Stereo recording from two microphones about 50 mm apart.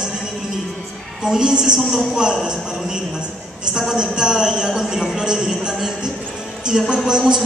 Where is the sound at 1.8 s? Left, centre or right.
Centre.